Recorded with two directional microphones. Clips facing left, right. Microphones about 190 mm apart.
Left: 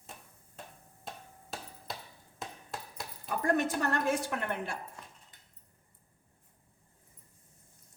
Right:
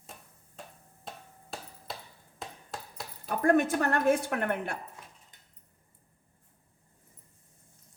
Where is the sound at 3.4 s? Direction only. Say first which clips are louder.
Right 5 dB; 55° right (ahead or behind).